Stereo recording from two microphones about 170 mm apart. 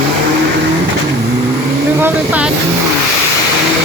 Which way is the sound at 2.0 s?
10° right (ahead or behind).